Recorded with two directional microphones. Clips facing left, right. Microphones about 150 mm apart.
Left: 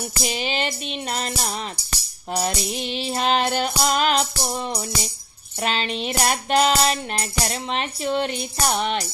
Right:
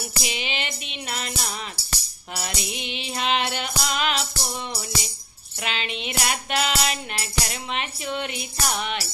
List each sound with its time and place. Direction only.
0.2 s music: 40° left (ahead or behind)